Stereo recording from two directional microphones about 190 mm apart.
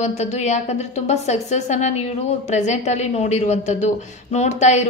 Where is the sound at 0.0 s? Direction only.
35° left (ahead or behind).